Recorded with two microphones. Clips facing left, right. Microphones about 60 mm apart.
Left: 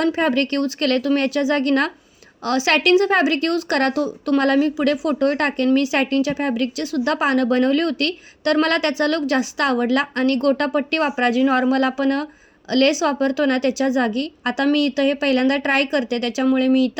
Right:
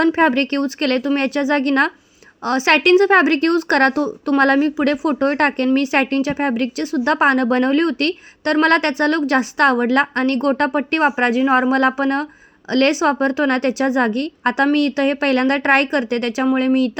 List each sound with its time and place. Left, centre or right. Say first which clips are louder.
0.0 s a woman's voice: right 4 dB; right